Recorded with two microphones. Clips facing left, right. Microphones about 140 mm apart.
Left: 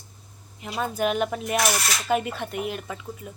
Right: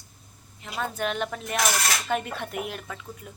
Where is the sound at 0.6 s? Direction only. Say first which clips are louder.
Left 4 dB; 15° left (ahead or behind).